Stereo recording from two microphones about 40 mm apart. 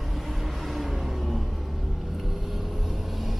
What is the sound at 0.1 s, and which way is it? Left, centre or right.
Vehicle, centre.